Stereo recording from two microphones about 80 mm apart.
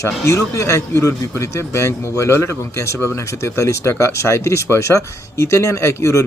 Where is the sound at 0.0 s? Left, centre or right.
Left.